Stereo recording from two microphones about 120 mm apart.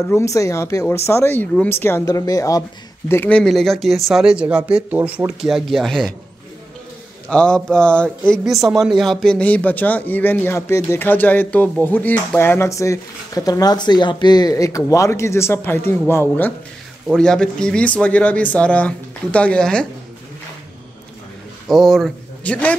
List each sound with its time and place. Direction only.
0.0 s a man's voice: 25° left (ahead or behind)
3.1 s speech: 15° left (ahead or behind)
7.2 s a man's voice: 10° left (ahead or behind)
8.5 s a man's voice: centre (ahead or behind); by 16.5 s 20° left (ahead or behind)
17.1 s a man's voice: 5° left (ahead or behind)
21.6 s speech: centre (ahead or behind)
22.4 s a man's voice: 10° left (ahead or behind)